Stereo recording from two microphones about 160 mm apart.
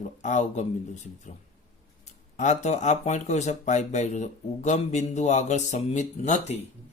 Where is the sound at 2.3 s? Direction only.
45° left (ahead or behind).